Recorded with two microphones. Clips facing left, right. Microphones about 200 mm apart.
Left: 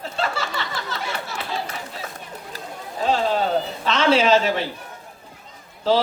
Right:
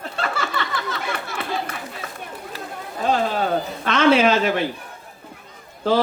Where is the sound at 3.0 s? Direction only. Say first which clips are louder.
Even; 55° right (ahead or behind).